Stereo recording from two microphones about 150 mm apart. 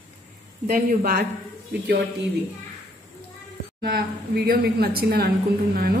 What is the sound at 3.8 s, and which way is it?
A woman's voice, 90° right.